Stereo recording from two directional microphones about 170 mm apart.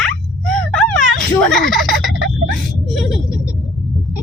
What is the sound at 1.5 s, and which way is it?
Turkey, centre (ahead or behind).